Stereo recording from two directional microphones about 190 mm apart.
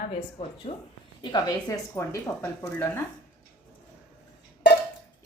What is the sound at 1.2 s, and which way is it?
A woman's voice, 20° left (ahead or behind).